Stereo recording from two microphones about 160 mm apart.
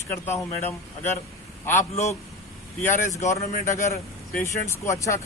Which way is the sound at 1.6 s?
15° left (ahead or behind).